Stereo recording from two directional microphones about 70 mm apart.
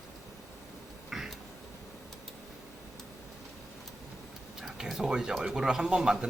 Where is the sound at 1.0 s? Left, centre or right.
Centre.